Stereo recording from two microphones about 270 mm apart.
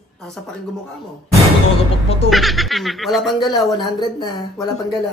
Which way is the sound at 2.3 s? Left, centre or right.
Centre.